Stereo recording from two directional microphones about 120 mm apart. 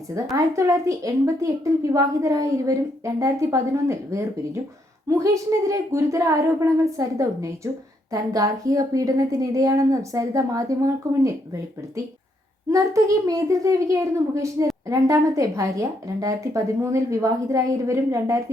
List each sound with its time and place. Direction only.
0.3 s a woman's voice: 25° right (ahead or behind)
12.7 s a woman's voice: 30° right (ahead or behind)